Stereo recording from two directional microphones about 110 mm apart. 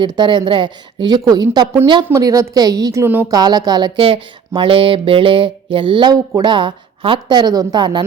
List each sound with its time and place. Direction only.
0.0 s mantra: 45° right (ahead or behind)
2.1 s a woman's voice: 30° right (ahead or behind)
4.0 s mantra: 55° right (ahead or behind)